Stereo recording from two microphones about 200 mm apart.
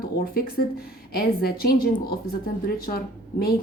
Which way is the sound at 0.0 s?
45° left (ahead or behind).